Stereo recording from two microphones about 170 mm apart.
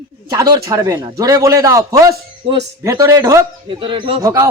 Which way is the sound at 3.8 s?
30° right (ahead or behind).